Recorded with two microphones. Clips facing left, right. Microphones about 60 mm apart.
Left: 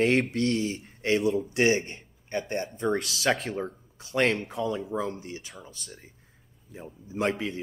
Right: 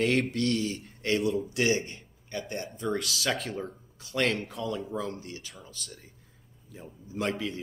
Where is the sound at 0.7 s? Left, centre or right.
Left.